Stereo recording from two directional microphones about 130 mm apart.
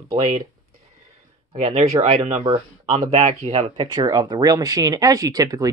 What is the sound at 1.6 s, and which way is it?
Speech, 60° right (ahead or behind).